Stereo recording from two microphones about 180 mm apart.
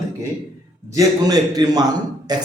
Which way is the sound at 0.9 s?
20° right (ahead or behind).